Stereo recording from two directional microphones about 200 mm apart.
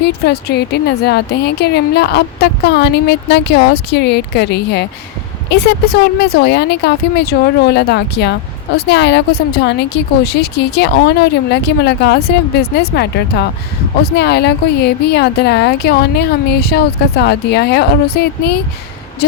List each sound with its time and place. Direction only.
0.0 s speech: 55° left (ahead or behind)